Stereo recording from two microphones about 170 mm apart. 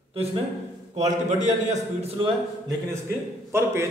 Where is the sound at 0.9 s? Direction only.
45° right (ahead or behind).